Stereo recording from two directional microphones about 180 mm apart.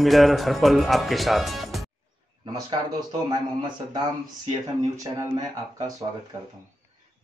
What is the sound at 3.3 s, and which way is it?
Speech, 25° right (ahead or behind).